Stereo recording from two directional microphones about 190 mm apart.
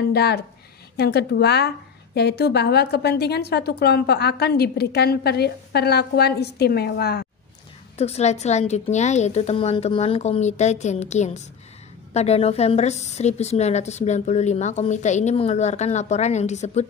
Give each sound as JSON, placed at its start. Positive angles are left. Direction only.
{"t": 0.1, "sound": "a woman's voice", "side_deg": 60}
{"t": 8.0, "sound": "a woman's voice", "side_deg": 35}